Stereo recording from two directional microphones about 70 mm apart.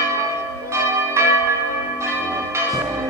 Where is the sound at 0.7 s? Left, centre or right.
Right.